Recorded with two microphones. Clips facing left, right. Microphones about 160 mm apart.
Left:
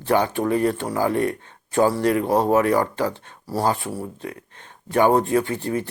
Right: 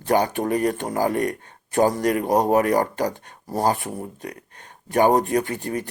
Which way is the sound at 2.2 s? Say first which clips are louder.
Even; 15° right (ahead or behind).